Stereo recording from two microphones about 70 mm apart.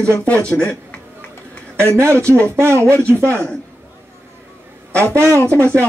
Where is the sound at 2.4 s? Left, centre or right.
Right.